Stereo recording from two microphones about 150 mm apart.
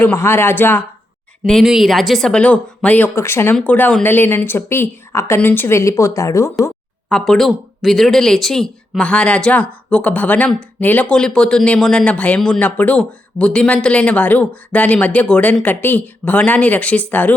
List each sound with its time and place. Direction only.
0.0 s speech: 15° left (ahead or behind)
1.5 s speech: centre (ahead or behind); by 6.5 s 20° left (ahead or behind)
7.1 s speech: 5° left (ahead or behind)